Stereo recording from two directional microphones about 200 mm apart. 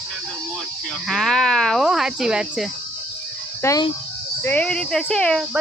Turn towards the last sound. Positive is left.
turn(degrees=0)  # may be behind; listen again after turning